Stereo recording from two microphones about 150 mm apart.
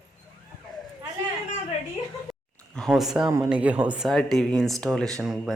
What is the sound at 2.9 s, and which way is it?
A woman's voice, 5° right (ahead or behind).